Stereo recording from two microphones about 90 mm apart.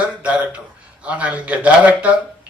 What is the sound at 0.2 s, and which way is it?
A man's voice, 15° right (ahead or behind).